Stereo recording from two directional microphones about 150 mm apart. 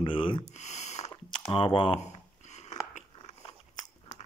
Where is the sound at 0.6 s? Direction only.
50° left (ahead or behind).